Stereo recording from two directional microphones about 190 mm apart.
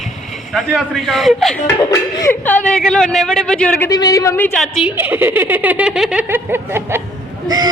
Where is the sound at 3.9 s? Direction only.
20° left (ahead or behind); by 4.9 s centre (ahead or behind).